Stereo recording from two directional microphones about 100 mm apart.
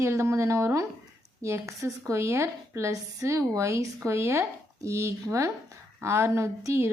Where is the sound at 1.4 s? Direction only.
30° right (ahead or behind).